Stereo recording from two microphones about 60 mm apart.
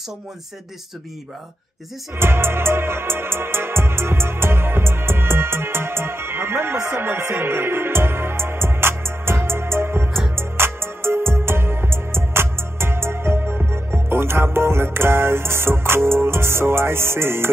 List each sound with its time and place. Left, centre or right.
2.1 s music: right